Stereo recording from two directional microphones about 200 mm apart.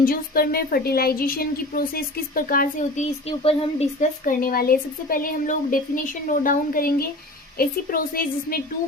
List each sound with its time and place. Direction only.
0.0 s a woman's voice: 45° left (ahead or behind); by 3.8 s 30° left (ahead or behind)
4.3 s a woman's voice: 45° left (ahead or behind)